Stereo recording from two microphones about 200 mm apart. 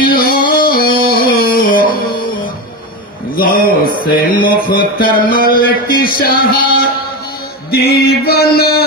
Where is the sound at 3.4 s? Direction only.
45° left (ahead or behind).